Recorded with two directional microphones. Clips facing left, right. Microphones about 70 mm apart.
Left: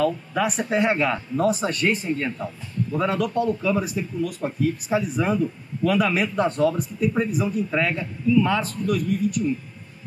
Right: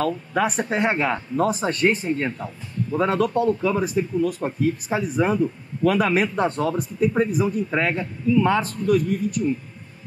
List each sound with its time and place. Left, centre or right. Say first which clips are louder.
0.0 s speech: even; right
5.9 s speech: right 2 dB; right